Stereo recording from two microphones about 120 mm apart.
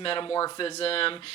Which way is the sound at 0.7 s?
55° left (ahead or behind).